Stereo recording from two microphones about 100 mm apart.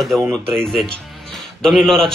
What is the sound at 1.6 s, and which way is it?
Speech, 5° left (ahead or behind).